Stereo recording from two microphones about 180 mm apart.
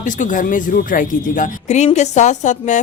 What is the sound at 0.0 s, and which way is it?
Speech, 45° left (ahead or behind).